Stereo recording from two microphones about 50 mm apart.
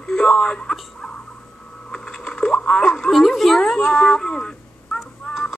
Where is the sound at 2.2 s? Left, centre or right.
Centre.